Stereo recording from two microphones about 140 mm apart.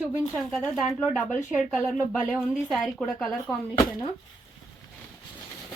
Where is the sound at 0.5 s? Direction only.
Centre (ahead or behind).